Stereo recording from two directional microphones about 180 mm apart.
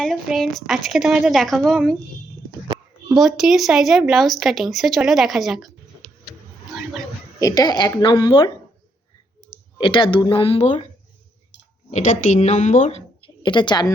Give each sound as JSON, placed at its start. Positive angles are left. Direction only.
{"t": 0.0, "sound": "speech", "side_deg": 0}
{"t": 3.2, "sound": "speech", "side_deg": 0}
{"t": 6.7, "sound": "a sound", "side_deg": 0}
{"t": 7.3, "sound": "a woman's voice", "side_deg": 20}
{"t": 9.7, "sound": "a woman's voice", "side_deg": 30}
{"t": 11.9, "sound": "speech", "side_deg": 45}
{"t": 13.2, "sound": "a woman's voice", "side_deg": 25}